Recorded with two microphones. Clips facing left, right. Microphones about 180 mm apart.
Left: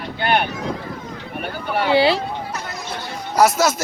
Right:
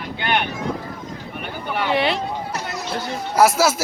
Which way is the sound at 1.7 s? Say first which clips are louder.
Left 4 dB; 35° left (ahead or behind).